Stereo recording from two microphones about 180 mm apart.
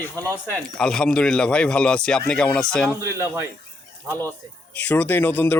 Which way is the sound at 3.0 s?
15° right (ahead or behind).